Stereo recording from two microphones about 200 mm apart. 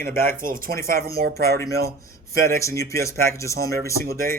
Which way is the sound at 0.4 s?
45° right (ahead or behind).